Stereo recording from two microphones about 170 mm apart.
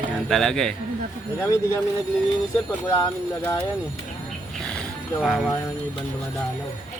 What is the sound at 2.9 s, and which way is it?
Speech, 20° left (ahead or behind).